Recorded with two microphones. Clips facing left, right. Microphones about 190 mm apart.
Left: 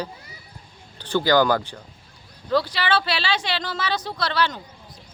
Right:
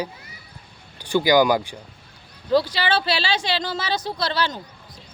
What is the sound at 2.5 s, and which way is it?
Speech, 35° right (ahead or behind).